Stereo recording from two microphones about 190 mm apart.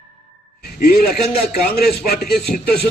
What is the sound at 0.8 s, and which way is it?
A man's voice, 50° left (ahead or behind).